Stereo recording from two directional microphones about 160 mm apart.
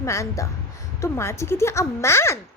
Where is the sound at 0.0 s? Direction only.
20° left (ahead or behind).